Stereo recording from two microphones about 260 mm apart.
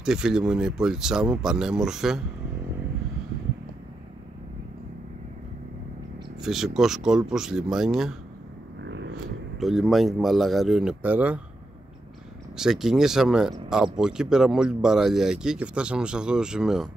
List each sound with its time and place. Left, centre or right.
0.0 s speech: centre
6.4 s speech: centre
8.8 s a sound: right
9.6 s speech: centre
12.5 s speech: centre